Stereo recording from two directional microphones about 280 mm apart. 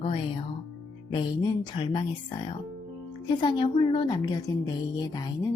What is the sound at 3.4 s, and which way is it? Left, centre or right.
A woman's voice, centre.